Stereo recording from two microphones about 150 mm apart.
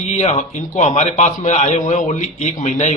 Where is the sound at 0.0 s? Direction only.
45° left (ahead or behind).